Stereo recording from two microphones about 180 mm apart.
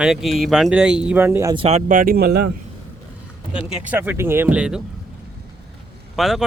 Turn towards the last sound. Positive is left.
turn(degrees=0)  # may be behind; listen again after turning